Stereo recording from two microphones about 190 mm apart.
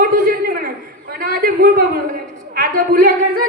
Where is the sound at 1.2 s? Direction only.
50° right (ahead or behind).